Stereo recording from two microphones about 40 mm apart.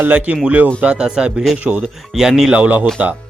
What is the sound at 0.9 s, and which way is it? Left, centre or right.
Speech, centre.